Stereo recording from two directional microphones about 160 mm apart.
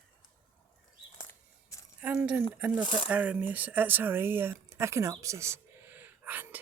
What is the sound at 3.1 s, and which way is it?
Speech, 10° right (ahead or behind).